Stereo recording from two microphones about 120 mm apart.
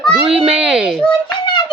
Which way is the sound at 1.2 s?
40° left (ahead or behind).